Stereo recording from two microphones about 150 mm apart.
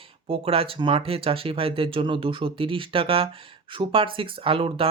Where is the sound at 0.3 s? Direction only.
40° right (ahead or behind).